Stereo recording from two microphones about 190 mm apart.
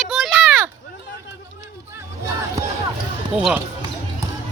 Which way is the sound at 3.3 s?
5° right (ahead or behind).